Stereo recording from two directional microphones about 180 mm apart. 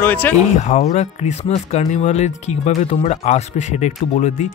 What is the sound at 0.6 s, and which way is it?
Speech, 40° left (ahead or behind).